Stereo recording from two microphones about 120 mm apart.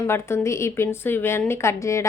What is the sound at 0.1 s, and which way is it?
A woman's voice, 20° left (ahead or behind).